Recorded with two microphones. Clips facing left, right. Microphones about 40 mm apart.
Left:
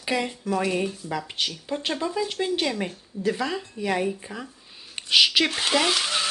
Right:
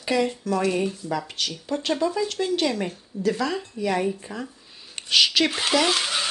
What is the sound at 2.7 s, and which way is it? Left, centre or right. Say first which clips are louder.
A woman's voice: right 1 dB; centre.